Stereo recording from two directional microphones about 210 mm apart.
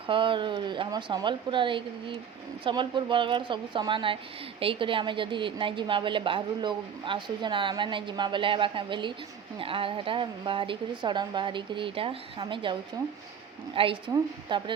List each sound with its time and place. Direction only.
0.1 s a woman's voice: 25° right (ahead or behind)
13.7 s a woman's voice: 25° right (ahead or behind)